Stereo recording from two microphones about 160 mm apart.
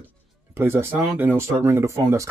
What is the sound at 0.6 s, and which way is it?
Speech, 15° right (ahead or behind).